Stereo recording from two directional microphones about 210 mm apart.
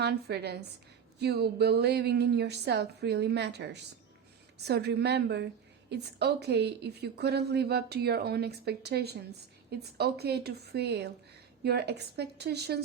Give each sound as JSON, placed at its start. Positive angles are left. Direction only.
{"t": 0.0, "sound": "a woman's voice", "side_deg": -50}